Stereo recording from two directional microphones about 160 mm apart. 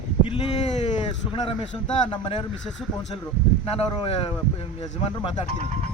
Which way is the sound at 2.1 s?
35° left (ahead or behind).